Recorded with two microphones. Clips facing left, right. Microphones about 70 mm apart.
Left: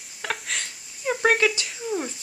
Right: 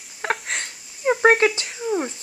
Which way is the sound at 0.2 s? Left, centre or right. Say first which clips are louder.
Right 5 dB; right.